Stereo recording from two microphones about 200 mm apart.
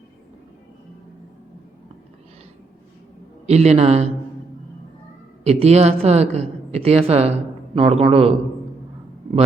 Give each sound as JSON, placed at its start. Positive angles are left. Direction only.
{"t": 3.4, "sound": "speech", "side_deg": -35}
{"t": 5.4, "sound": "a man's voice", "side_deg": -30}